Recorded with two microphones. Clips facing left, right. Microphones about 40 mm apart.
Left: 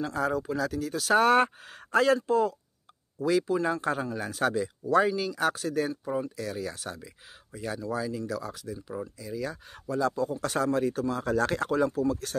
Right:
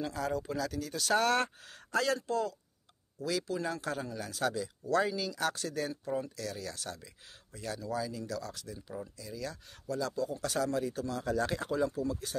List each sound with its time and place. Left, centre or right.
0.0 s speech: centre
1.2 s speech: centre
3.4 s speech: centre
3.8 s a man's voice: left
4.8 s speech: left
11.3 s speech: left